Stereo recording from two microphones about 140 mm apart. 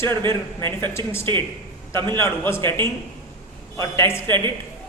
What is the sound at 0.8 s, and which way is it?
A man's voice, 20° left (ahead or behind).